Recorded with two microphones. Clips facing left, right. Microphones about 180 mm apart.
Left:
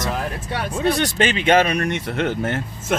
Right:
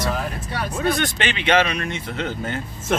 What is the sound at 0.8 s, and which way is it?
Speech, 35° left (ahead or behind).